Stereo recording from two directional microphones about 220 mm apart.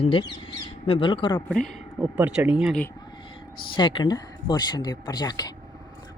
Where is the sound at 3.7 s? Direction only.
20° left (ahead or behind).